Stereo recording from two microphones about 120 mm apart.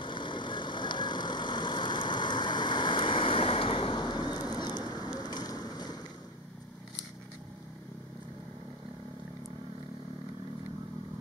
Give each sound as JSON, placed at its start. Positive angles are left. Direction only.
{"t": 0.0, "sound": "vehicle", "side_deg": 40}
{"t": 4.6, "sound": "rain", "side_deg": 35}